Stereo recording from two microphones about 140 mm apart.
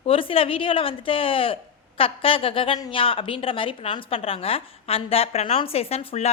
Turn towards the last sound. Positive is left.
turn(degrees=45)  # may be behind; listen again after turning